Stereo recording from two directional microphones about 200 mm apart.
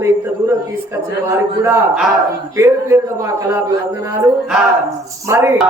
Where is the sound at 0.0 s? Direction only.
15° right (ahead or behind).